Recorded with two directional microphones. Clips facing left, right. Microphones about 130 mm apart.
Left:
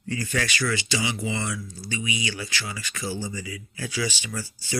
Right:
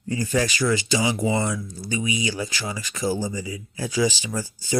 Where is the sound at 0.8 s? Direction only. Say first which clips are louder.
Right 5 dB; 45° right (ahead or behind).